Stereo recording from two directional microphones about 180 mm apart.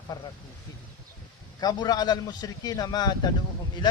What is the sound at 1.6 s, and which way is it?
A man's voice, 20° left (ahead or behind).